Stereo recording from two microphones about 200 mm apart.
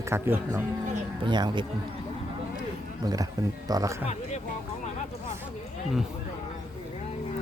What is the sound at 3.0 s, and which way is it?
Speech, 20° right (ahead or behind).